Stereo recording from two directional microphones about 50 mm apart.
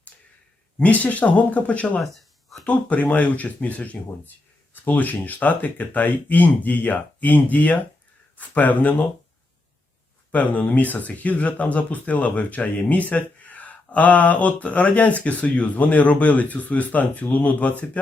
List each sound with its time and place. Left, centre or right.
0.8 s speech: left
2.1 s a sound: centre
2.6 s speech: left
10.3 s speech: left